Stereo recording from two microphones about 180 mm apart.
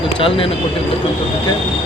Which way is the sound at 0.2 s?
30° left (ahead or behind).